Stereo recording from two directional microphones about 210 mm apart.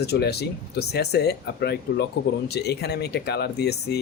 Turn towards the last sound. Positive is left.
turn(degrees=50)  # may be behind; listen again after turning